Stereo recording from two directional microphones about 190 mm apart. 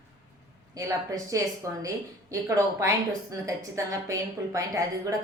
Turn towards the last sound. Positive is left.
turn(degrees=-15)  # may be behind; listen again after turning